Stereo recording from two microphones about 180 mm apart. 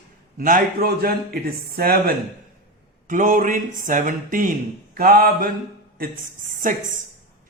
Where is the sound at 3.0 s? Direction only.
45° right (ahead or behind).